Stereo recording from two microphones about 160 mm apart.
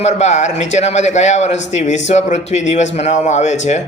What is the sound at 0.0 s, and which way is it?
Speech, 45° left (ahead or behind).